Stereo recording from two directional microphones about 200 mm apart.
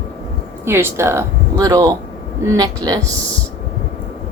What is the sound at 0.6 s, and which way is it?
Speech, 10° right (ahead or behind).